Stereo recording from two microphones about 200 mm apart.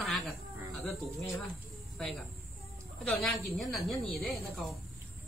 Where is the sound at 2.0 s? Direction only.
Centre (ahead or behind).